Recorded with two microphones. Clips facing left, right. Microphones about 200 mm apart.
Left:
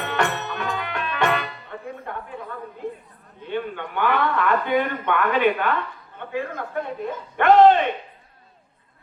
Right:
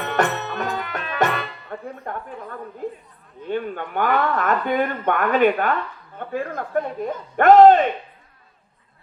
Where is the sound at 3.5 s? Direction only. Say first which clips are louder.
Right 2 dB; 45° right (ahead or behind).